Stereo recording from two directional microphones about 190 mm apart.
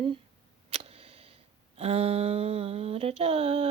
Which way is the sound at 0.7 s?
30° right (ahead or behind).